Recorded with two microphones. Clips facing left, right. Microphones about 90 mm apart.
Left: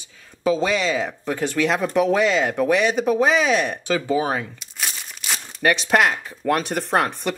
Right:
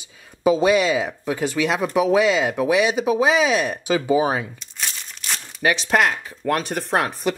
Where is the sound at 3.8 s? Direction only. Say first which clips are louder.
Right 2 dB; 15° right (ahead or behind).